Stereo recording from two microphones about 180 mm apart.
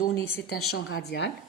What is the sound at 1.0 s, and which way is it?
Speech, 65° left (ahead or behind).